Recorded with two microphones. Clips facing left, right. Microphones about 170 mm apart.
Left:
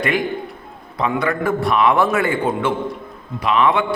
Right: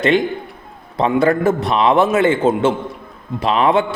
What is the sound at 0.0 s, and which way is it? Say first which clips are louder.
A man's voice: right 5 dB; 25° right (ahead or behind).